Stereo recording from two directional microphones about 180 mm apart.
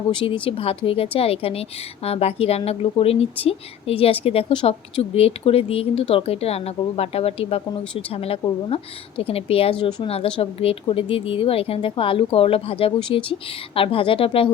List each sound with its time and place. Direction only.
0.1 s a woman's voice: 30° left (ahead or behind)